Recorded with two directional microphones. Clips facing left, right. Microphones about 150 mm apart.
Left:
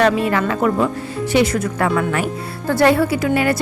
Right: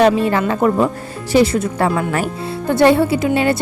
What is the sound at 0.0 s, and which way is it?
A woman's voice, 30° right (ahead or behind).